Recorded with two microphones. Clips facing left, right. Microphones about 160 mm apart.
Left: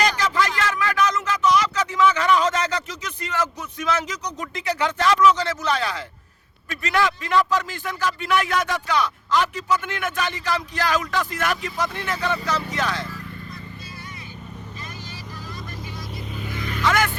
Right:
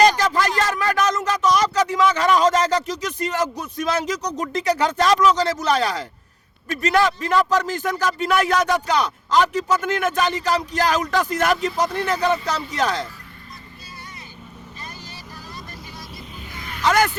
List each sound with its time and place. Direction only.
0.0 s a sound: 40° right (ahead or behind)
6.7 s speech: 40° right (ahead or behind)
16.8 s speech: 40° right (ahead or behind)